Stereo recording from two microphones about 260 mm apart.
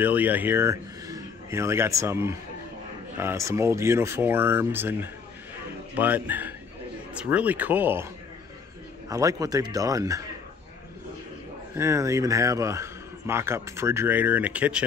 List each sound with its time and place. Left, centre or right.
0.0 s speech: centre
9.1 s speech: centre
11.7 s speech: centre